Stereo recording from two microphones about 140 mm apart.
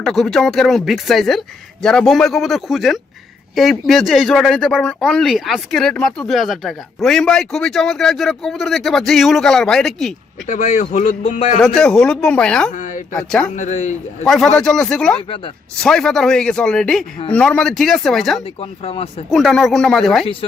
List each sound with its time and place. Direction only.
0.0 s speech: centre (ahead or behind)
10.4 s speech: 60° left (ahead or behind)
11.6 s speech: 5° left (ahead or behind)
13.6 s speech: 55° left (ahead or behind)
14.3 s speech: centre (ahead or behind)
18.6 s speech: 45° left (ahead or behind)
19.3 s speech: centre (ahead or behind)